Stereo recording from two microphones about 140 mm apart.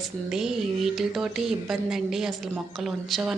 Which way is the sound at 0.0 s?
5° right (ahead or behind).